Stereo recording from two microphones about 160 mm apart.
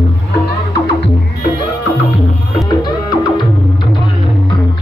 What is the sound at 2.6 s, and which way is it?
Music, 25° left (ahead or behind).